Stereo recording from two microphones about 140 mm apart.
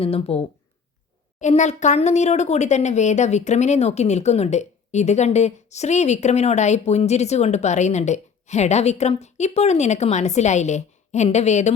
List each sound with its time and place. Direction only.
0.0 s speech: 45° left (ahead or behind)
1.4 s speech: 55° left (ahead or behind)